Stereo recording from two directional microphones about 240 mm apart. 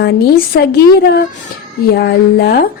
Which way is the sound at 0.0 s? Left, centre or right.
Left.